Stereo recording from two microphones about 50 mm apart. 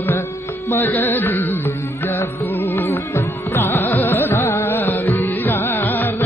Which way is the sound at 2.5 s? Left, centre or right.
Left.